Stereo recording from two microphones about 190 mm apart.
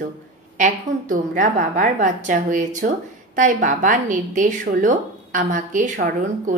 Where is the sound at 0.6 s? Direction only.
40° right (ahead or behind).